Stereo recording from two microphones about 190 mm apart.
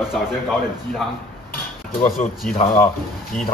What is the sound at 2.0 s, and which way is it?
Speech, 45° left (ahead or behind).